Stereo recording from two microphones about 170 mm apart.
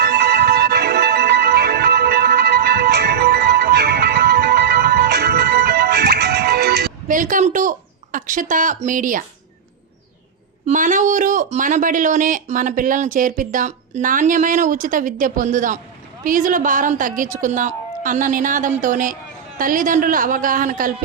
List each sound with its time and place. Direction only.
0.0 s music: 70° right (ahead or behind)
7.1 s a woman's voice: 50° right (ahead or behind)
10.7 s speech: 45° right (ahead or behind)